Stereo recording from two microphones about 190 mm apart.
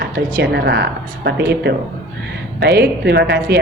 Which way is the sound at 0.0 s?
60° right (ahead or behind).